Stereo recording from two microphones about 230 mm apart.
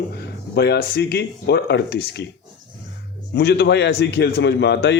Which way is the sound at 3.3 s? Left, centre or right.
Left.